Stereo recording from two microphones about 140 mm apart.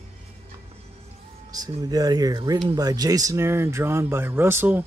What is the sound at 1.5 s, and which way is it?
Speech, 25° right (ahead or behind).